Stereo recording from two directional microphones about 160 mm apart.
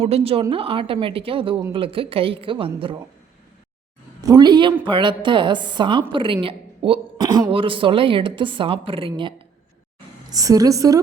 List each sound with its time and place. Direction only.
0.0 s a woman's voice: 40° right (ahead or behind)
4.3 s a woman's voice: 25° right (ahead or behind)
7.2 s a woman's voice: 20° right (ahead or behind)
7.5 s a woman's voice: 35° right (ahead or behind)